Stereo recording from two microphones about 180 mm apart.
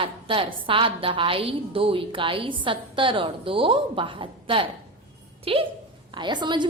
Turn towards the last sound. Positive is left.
turn(degrees=-25)  # may be behind; listen again after turning